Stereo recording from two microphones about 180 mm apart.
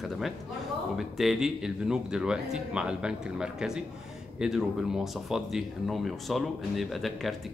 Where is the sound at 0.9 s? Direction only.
Centre (ahead or behind).